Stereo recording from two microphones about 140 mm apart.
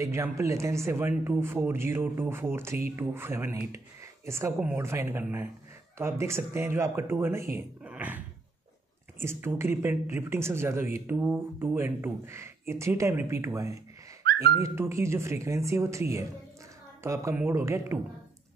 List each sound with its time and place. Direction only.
0.0 s speech: 20° right (ahead or behind)
9.2 s speech: 15° right (ahead or behind)